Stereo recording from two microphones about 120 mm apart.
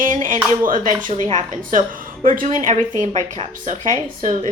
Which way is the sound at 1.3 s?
90° right.